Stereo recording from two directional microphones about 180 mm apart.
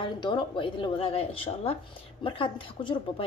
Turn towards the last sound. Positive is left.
turn(degrees=30)  # may be behind; listen again after turning